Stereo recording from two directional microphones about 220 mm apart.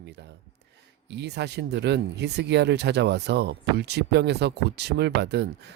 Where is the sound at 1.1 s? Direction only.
50° right (ahead or behind).